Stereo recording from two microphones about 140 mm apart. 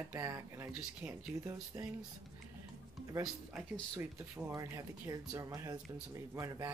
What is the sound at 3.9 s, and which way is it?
Speech, 20° right (ahead or behind).